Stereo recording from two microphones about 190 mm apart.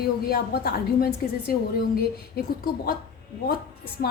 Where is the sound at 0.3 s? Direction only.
55° left (ahead or behind).